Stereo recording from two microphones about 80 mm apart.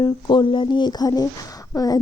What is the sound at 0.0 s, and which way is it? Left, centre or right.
A woman's voice, left.